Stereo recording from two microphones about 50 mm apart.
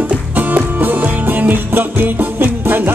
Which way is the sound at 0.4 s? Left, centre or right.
Right.